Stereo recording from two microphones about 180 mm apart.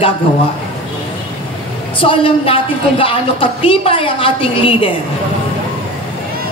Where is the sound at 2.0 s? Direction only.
30° left (ahead or behind).